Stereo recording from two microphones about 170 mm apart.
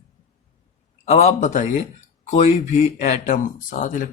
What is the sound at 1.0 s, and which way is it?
Speech, 40° left (ahead or behind).